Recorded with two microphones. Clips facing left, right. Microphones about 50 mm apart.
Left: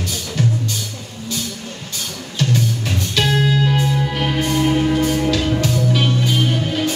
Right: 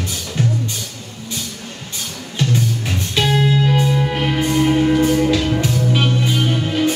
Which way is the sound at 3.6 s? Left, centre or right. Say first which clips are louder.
Right 2 dB; centre.